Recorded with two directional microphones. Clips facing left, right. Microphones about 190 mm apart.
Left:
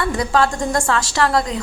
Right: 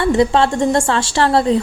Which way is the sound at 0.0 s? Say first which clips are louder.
Right 5 dB; 25° right (ahead or behind).